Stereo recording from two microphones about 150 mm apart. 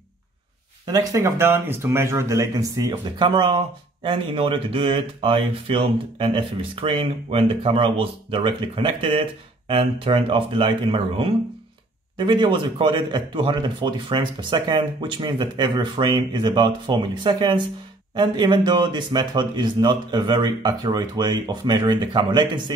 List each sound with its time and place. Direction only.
0.8 s speech: 20° right (ahead or behind)
2.9 s speech: 30° right (ahead or behind)